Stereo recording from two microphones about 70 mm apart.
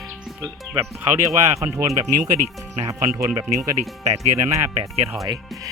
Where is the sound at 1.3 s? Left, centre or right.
Right.